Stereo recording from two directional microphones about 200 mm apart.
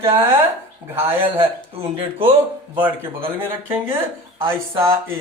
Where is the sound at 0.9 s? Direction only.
10° right (ahead or behind).